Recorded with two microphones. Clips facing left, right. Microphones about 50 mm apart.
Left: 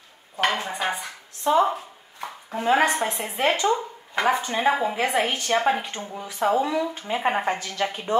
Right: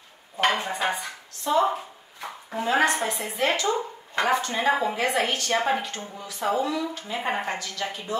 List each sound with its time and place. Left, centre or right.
0.7 s dishes: centre
1.4 s speech: left
4.9 s speech: centre